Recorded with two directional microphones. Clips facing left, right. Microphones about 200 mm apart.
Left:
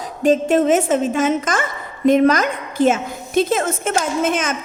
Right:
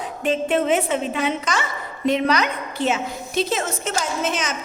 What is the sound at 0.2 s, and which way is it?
A woman's voice, 40° left (ahead or behind).